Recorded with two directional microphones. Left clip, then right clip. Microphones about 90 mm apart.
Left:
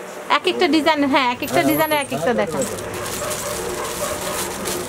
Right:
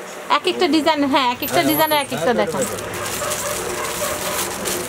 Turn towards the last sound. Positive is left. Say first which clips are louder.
# right 1 dB
turn(degrees=-5)  # may be behind; listen again after turning